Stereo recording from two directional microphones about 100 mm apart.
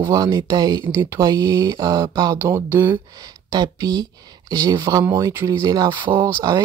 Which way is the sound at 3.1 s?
40° right (ahead or behind).